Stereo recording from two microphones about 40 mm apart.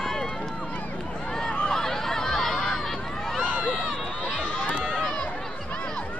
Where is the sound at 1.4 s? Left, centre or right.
Left.